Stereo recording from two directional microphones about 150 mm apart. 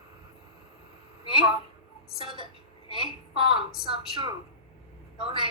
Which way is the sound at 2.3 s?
35° right (ahead or behind).